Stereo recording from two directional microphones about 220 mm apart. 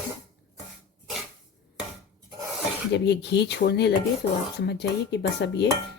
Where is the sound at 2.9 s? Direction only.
50° left (ahead or behind).